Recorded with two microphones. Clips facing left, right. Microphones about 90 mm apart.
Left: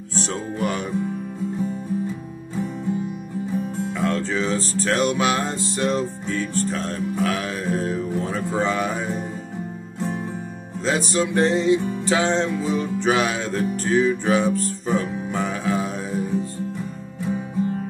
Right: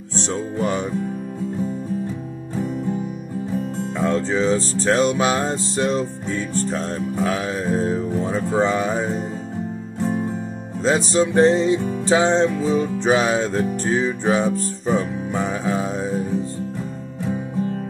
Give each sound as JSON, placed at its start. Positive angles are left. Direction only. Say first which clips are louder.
{"t": 0.3, "sound": "music", "louder": "right 4 dB", "side_deg": -20}
{"t": 3.9, "sound": "music", "louder": "right 4 dB", "side_deg": -30}
{"t": 5.9, "sound": "music", "louder": "right 1 dB", "side_deg": 0}
{"t": 7.2, "sound": "music", "louder": "right 2 dB", "side_deg": -25}
{"t": 10.8, "sound": "music", "louder": "right 4 dB", "side_deg": -30}
{"t": 14.9, "sound": "music", "louder": "right 3 dB", "side_deg": 0}
{"t": 15.5, "sound": "music", "louder": "right 1 dB", "side_deg": -20}